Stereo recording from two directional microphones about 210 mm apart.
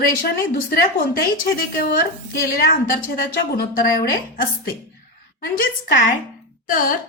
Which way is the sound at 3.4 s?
45° left (ahead or behind).